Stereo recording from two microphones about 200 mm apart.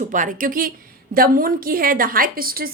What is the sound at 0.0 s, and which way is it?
A woman's voice, 40° right (ahead or behind).